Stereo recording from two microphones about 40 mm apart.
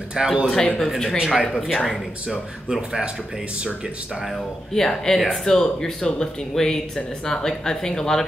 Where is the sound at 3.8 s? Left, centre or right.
Centre.